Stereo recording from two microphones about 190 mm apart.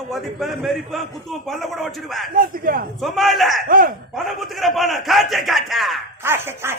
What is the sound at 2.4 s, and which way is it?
Speech, 50° right (ahead or behind).